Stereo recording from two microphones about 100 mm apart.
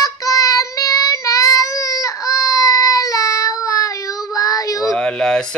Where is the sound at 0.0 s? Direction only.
35° left (ahead or behind).